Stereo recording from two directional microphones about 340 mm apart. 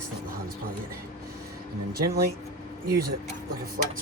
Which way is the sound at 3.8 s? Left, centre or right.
Right.